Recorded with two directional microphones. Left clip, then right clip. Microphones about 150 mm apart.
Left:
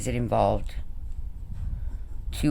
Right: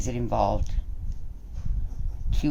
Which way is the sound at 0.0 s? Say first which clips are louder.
Left 2 dB; 60° left (ahead or behind).